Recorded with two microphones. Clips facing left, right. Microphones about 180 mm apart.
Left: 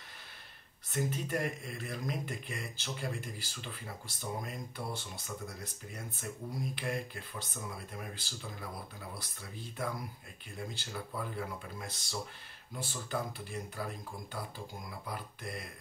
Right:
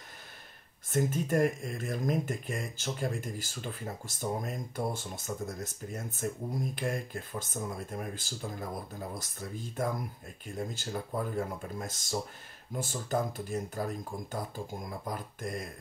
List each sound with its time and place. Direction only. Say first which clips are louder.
0.8 s speech: right 6 dB; 45° right (ahead or behind)